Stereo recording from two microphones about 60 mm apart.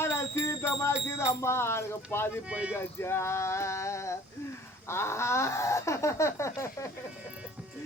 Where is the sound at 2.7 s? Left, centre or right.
Left.